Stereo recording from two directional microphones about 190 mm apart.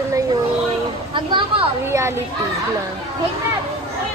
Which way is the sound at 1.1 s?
25° right (ahead or behind).